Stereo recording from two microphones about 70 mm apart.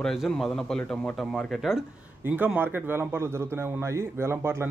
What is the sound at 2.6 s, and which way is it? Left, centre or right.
A man's voice, right.